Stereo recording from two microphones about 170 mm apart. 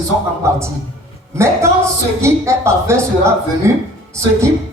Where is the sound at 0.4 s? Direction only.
15° right (ahead or behind).